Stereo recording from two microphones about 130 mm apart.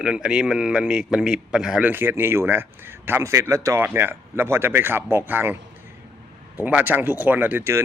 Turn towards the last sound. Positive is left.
turn(degrees=-20)  # may be behind; listen again after turning